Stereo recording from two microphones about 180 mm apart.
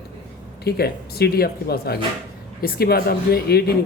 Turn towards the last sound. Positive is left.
turn(degrees=60)  # may be behind; listen again after turning